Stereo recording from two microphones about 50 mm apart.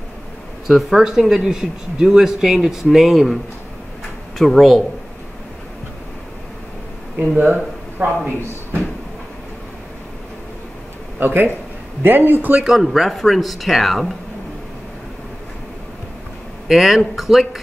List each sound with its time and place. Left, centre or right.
0.7 s speech: centre
4.4 s speech: centre
7.2 s speech: right
11.1 s speech: right
12.6 s speech: centre
16.6 s speech: centre